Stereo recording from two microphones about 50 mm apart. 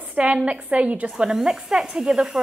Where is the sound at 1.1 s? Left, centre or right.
Centre.